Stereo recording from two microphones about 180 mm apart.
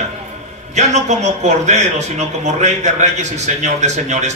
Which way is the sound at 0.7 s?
40° right (ahead or behind).